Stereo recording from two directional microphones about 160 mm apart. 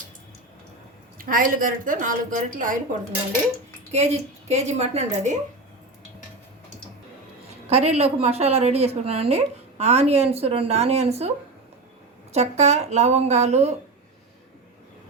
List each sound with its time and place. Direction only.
1.2 s a woman's voice: 60° right (ahead or behind)
3.9 s a woman's voice: 45° right (ahead or behind)
7.7 s a woman's voice: 40° right (ahead or behind)
12.3 s a woman's voice: 45° right (ahead or behind)